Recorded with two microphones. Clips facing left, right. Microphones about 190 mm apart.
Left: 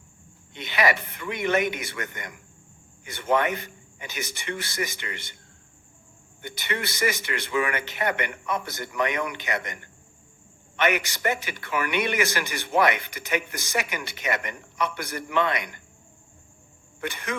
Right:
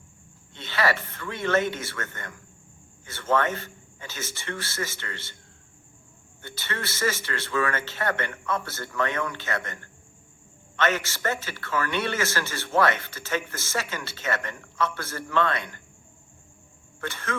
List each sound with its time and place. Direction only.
0.5 s a man's voice: 15° left (ahead or behind)
6.4 s a man's voice: 15° left (ahead or behind)
17.0 s a man's voice: 15° left (ahead or behind)